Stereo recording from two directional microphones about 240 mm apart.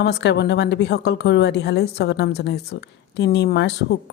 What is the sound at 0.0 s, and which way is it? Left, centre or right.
A woman's voice, left.